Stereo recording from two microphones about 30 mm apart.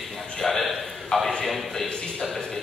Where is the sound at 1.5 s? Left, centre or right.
Centre.